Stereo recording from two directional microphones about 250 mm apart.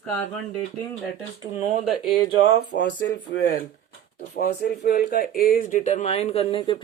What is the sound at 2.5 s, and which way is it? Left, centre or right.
Speech, left.